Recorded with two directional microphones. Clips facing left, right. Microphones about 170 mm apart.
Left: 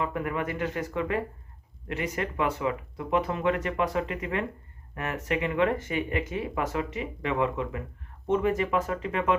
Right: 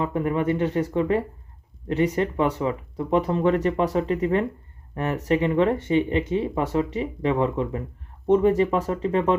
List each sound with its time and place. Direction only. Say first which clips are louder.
0.0 s speech: right 6 dB; 30° right (ahead or behind)